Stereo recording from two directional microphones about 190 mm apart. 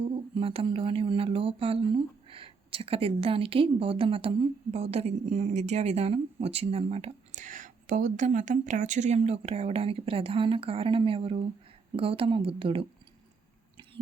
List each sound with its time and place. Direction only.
0.0 s speech: 30° right (ahead or behind)